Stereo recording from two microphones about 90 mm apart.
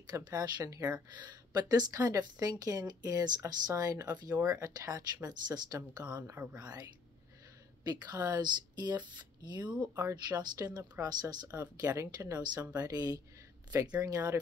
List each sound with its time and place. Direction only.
0.0 s speech: 45° right (ahead or behind)